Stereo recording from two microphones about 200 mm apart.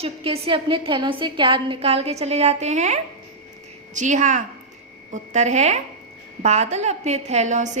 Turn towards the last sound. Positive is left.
turn(degrees=-35)  # may be behind; listen again after turning